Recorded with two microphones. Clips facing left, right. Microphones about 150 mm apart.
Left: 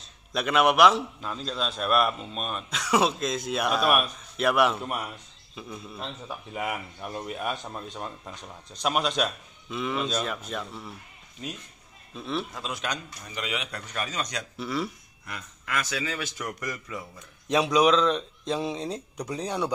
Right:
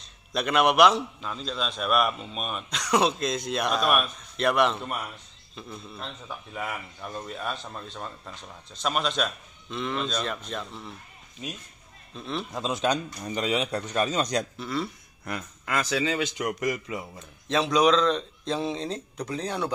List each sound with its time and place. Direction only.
0.3 s a man's voice: centre (ahead or behind)
12.1 s a man's voice: 5° left (ahead or behind)
12.5 s a man's voice: 25° right (ahead or behind)
14.6 s a man's voice: 5° left (ahead or behind)
15.6 s a man's voice: 30° right (ahead or behind)
17.5 s speech: 10° left (ahead or behind)